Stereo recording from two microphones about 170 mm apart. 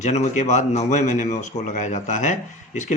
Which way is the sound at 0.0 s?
40° left (ahead or behind).